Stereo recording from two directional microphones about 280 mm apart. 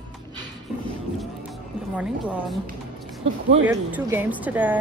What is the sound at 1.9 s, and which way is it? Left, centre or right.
Speech, centre.